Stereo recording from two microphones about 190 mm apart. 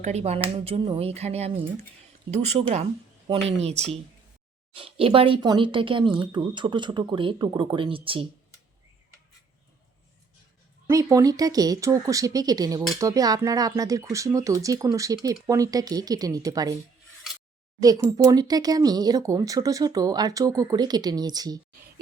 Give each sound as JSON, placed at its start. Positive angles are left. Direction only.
{"t": 0.0, "sound": "speech", "side_deg": -35}
{"t": 10.8, "sound": "speech", "side_deg": -15}
{"t": 17.7, "sound": "speech", "side_deg": -20}